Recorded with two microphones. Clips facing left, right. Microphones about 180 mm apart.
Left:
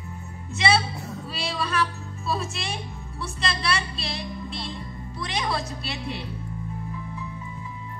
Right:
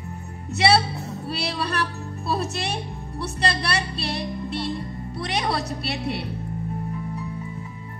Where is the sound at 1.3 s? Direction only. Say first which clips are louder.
Right 2 dB; 65° right (ahead or behind).